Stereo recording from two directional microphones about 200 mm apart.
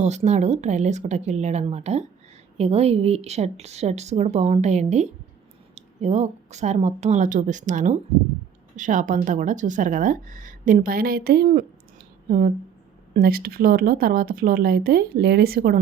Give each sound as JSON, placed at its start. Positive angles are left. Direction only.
{"t": 0.0, "sound": "speech", "side_deg": -35}
{"t": 13.1, "sound": "speech", "side_deg": -50}